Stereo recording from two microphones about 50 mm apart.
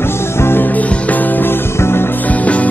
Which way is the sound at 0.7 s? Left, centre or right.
Left.